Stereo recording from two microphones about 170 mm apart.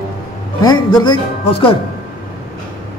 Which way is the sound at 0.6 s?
25° left (ahead or behind).